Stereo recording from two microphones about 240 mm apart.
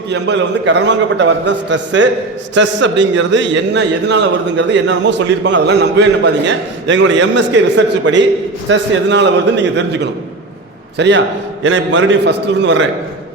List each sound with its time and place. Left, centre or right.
0.1 s a man's voice: right